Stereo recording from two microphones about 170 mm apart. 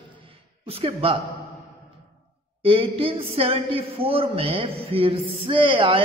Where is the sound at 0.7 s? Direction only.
35° right (ahead or behind).